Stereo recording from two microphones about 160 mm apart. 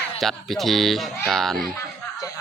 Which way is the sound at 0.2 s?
Centre (ahead or behind).